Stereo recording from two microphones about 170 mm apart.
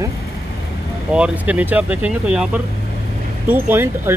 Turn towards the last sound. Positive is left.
turn(degrees=-15)  # may be behind; listen again after turning